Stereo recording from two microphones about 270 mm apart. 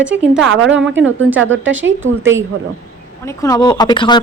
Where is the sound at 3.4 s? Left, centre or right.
Centre.